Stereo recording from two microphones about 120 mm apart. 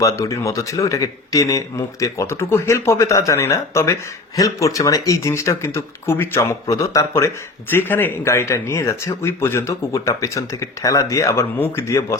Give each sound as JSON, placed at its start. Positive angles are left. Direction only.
{"t": 0.0, "sound": "speech", "side_deg": 25}